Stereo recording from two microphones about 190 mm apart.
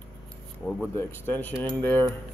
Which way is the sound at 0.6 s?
10° left (ahead or behind).